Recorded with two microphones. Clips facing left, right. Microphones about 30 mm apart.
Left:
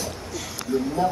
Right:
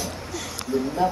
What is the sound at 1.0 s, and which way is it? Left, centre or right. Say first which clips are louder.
Speech: right 1 dB; centre.